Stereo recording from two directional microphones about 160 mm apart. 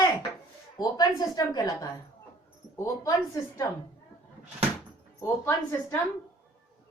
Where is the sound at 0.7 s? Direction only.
25° left (ahead or behind).